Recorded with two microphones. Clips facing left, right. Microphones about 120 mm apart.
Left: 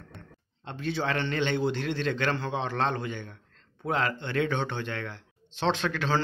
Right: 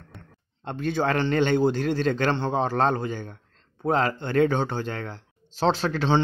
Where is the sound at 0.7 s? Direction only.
50° right (ahead or behind).